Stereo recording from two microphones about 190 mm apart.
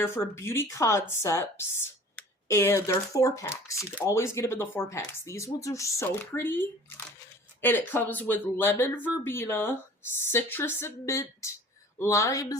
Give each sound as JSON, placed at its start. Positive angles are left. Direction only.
{"t": 0.0, "sound": "speech", "side_deg": 15}
{"t": 7.6, "sound": "speech", "side_deg": 10}